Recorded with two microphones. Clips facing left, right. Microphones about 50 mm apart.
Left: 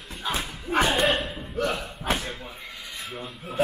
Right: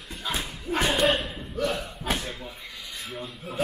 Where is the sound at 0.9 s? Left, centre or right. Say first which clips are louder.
Even; centre.